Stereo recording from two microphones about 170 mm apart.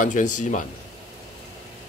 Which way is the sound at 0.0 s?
50° left (ahead or behind).